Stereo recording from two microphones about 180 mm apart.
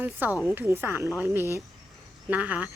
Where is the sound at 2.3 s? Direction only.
10° right (ahead or behind).